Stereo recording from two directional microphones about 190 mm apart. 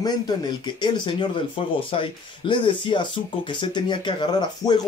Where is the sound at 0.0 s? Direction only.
25° left (ahead or behind).